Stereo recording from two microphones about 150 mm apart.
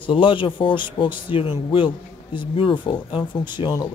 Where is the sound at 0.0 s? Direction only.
35° left (ahead or behind).